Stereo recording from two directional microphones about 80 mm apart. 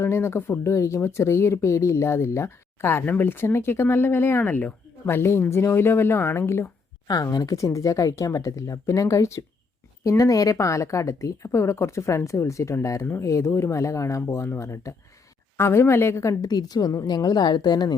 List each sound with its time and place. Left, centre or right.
0.0 s speech: left
0.6 s speech: left
7.1 s speech: left
16.4 s a woman's voice: left